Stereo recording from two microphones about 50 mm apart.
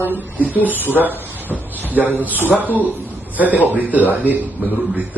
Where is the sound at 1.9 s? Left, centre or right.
Right.